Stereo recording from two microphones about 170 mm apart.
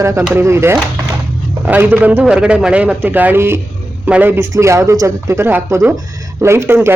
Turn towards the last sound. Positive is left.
turn(degrees=-15)  # may be behind; listen again after turning